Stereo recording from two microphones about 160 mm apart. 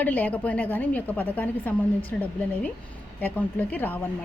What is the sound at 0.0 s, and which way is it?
A woman's voice, 10° left (ahead or behind).